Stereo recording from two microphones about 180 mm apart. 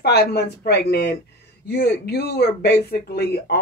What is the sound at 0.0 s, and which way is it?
Speech, 65° left (ahead or behind).